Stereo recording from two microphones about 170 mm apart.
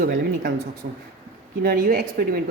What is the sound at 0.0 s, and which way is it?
Speech, 85° right.